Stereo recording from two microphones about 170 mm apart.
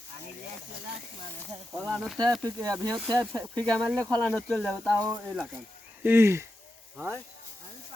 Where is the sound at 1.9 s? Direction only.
Centre (ahead or behind).